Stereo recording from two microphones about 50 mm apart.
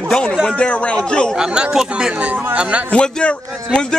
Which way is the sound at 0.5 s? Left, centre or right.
Left.